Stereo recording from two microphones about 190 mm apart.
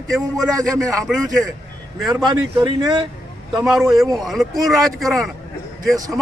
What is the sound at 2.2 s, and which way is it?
Speech, 20° right (ahead or behind).